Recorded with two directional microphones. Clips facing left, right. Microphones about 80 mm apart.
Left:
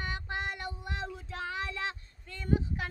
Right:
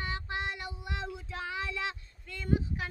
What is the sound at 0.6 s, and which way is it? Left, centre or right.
Child singing, left.